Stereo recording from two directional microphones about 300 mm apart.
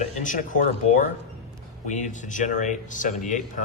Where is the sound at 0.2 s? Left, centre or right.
Left.